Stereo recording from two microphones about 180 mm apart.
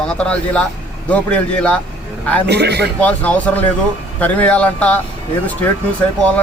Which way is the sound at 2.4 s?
65° right (ahead or behind).